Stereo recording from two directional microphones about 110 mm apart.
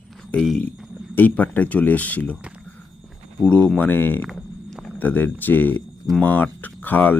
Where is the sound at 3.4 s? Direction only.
10° left (ahead or behind).